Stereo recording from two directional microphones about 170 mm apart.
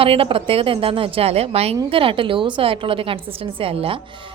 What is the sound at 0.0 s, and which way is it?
A woman's voice, 35° right (ahead or behind).